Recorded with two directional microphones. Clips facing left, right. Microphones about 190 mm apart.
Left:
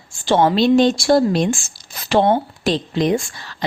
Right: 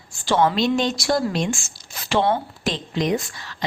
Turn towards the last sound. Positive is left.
turn(degrees=30)  # may be behind; listen again after turning